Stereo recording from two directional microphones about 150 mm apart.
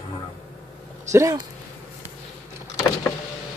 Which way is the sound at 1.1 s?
20° right (ahead or behind).